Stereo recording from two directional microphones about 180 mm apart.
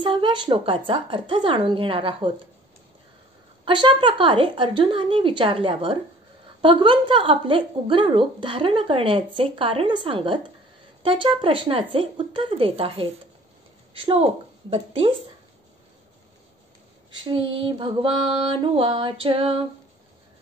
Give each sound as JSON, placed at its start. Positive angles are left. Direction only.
{"t": 0.0, "sound": "a woman's voice", "side_deg": -30}
{"t": 3.6, "sound": "a woman's voice", "side_deg": -25}
{"t": 17.2, "sound": "a woman's voice", "side_deg": -30}